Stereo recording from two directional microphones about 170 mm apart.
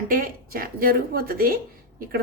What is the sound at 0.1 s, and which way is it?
A woman's voice, 55° right (ahead or behind).